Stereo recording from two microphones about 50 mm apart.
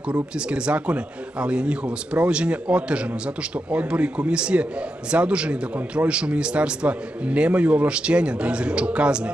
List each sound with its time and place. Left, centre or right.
0.1 s a man's voice: right